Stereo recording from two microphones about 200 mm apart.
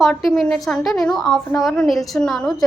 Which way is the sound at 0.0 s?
Centre (ahead or behind).